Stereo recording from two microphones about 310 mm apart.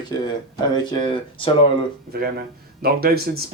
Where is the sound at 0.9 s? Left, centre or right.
Centre.